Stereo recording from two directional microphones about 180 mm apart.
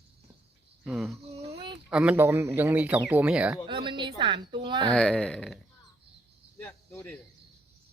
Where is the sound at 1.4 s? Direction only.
30° right (ahead or behind).